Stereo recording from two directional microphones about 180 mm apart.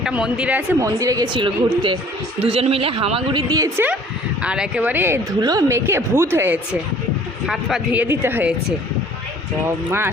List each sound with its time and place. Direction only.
0.0 s speech: 5° right (ahead or behind); by 3.4 s 30° right (ahead or behind)
3.5 s speech: 20° right (ahead or behind)
4.4 s speech: 5° right (ahead or behind)
7.4 s a man's voice: centre (ahead or behind)
9.6 s speech: 10° right (ahead or behind)